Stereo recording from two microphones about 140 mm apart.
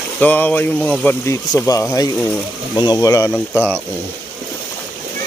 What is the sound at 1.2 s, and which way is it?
Speech, 25° left (ahead or behind).